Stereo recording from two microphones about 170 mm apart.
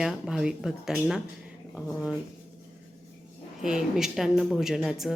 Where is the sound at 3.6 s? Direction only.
5° right (ahead or behind).